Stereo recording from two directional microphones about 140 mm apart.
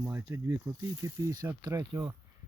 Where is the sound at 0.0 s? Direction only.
20° right (ahead or behind).